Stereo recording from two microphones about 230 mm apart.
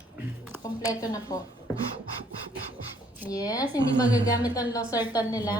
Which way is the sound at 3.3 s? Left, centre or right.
Centre.